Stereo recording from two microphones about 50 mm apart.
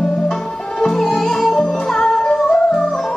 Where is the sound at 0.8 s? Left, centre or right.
Centre.